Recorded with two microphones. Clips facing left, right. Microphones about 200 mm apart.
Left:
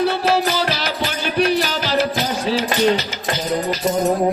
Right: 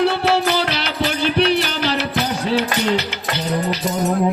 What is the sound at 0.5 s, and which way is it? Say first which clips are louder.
Music: even; 65° right (ahead or behind).